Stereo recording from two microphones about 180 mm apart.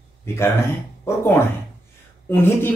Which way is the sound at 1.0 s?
15° left (ahead or behind).